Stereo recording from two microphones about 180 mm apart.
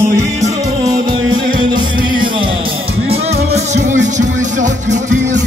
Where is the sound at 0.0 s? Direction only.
15° right (ahead or behind); by 5.4 s 40° right (ahead or behind).